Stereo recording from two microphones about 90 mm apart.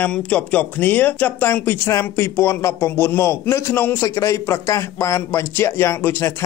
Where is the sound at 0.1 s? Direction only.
15° left (ahead or behind).